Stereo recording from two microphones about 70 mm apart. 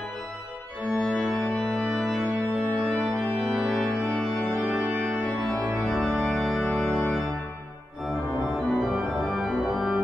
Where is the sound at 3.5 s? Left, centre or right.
Centre.